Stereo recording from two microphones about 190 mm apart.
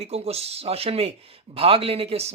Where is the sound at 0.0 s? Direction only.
35° right (ahead or behind).